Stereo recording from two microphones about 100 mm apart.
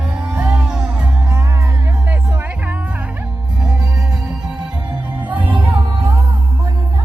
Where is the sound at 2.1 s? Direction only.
20° right (ahead or behind).